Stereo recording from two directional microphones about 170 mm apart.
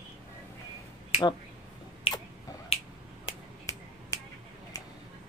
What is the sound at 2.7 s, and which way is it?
Finger snapping, 35° left (ahead or behind).